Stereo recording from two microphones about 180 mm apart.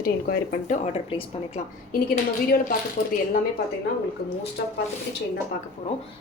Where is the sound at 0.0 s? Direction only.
55° left (ahead or behind).